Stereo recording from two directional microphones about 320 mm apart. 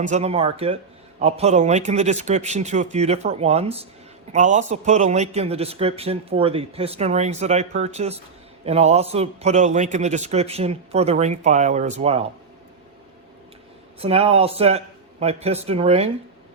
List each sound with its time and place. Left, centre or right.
0.0 s a man's voice: right
14.0 s a man's voice: centre